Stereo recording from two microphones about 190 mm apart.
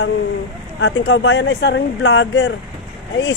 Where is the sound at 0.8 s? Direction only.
65° left (ahead or behind).